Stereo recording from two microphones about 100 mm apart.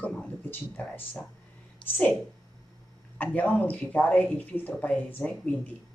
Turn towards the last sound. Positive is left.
turn(degrees=15)  # may be behind; listen again after turning